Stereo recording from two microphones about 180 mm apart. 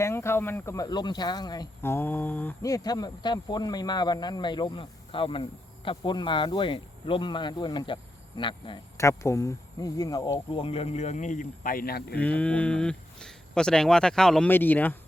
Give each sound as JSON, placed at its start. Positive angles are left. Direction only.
{"t": 0.0, "sound": "speech", "side_deg": 15}
{"t": 9.0, "sound": "speech", "side_deg": 15}
{"t": 12.1, "sound": "speech", "side_deg": 10}